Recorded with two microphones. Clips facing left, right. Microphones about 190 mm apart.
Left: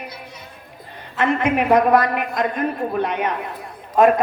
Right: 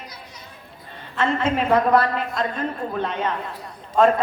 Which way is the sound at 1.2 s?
15° left (ahead or behind).